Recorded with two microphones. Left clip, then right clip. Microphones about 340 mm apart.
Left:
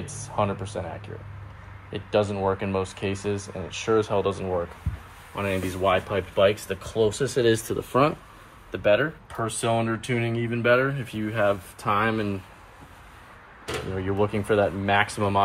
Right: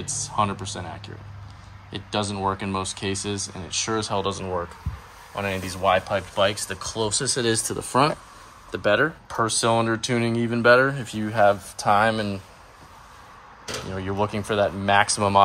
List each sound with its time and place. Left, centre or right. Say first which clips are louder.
0.0 s speech: right 3 dB; centre
5.9 s speech: right 3 dB; centre
10.0 s speech: right 3 dB; right
10.5 s speech: right 5 dB; centre
13.9 s speech: even; centre